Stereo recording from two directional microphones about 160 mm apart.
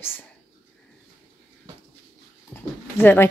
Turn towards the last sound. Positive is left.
turn(degrees=15)  # may be behind; listen again after turning